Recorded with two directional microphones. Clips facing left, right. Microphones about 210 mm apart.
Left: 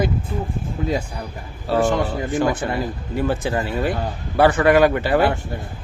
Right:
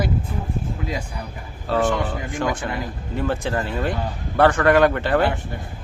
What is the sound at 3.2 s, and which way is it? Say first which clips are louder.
Speech: left 2 dB; 10° left (ahead or behind).